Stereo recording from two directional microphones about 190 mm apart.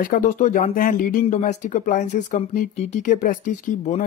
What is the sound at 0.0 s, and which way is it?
A man's voice, 45° left (ahead or behind).